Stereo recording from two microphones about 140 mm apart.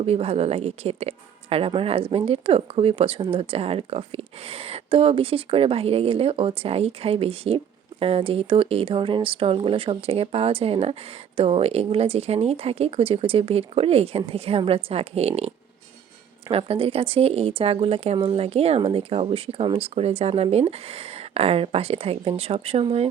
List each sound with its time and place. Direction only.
0.0 s speech: 45° right (ahead or behind)